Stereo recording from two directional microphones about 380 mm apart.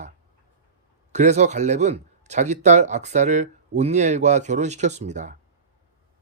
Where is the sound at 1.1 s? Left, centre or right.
Centre.